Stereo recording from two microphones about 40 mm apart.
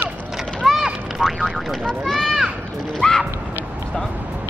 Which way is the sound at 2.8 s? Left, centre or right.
Centre.